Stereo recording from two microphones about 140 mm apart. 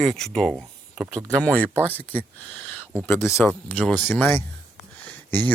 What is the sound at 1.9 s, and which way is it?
Speech, 15° left (ahead or behind).